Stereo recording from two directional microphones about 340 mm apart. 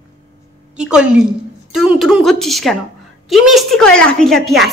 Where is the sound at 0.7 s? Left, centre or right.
Centre.